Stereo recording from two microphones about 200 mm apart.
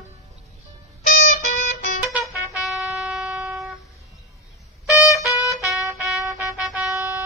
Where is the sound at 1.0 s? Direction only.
40° left (ahead or behind).